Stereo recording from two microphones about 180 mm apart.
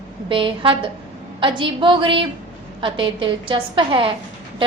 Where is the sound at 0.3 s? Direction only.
30° right (ahead or behind).